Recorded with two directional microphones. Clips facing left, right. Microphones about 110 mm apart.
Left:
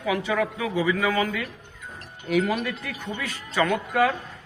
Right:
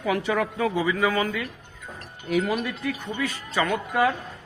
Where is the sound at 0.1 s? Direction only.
45° right (ahead or behind).